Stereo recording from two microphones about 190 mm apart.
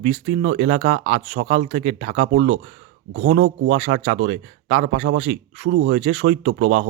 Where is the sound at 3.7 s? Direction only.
35° right (ahead or behind).